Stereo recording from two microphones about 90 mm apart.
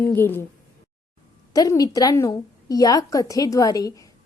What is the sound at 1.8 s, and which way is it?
A woman's voice, 45° left (ahead or behind).